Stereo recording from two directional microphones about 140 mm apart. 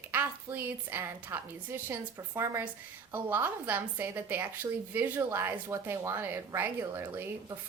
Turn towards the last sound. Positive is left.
turn(degrees=-15)  # may be behind; listen again after turning